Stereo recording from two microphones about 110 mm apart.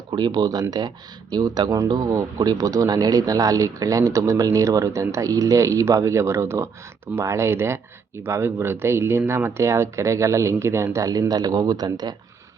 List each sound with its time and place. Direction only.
0.1 s speech: 40° right (ahead or behind)